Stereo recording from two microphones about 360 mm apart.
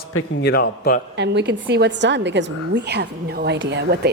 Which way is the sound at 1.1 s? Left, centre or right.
Right.